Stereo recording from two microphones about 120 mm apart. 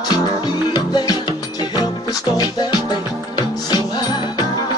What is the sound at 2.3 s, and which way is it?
Music, 30° left (ahead or behind).